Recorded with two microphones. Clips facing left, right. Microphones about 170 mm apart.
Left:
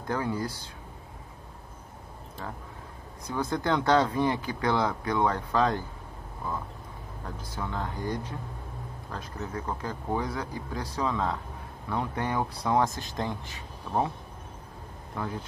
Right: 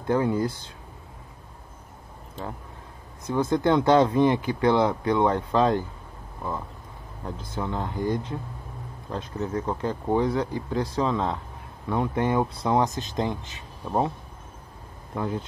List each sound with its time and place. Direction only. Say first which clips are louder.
0.1 s speech: right 7 dB; 25° right (ahead or behind)
3.3 s speech: right 6 dB; 25° right (ahead or behind)
7.2 s speech: right 5 dB; 20° right (ahead or behind)
15.1 s speech: right 5 dB; 25° right (ahead or behind)